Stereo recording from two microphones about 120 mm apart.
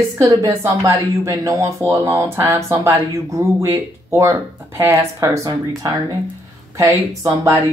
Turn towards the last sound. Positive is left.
turn(degrees=-25)  # may be behind; listen again after turning